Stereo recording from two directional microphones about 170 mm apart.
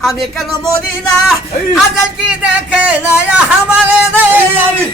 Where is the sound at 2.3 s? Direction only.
5° right (ahead or behind).